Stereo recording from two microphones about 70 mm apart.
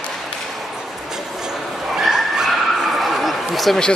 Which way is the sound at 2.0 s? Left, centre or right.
Centre.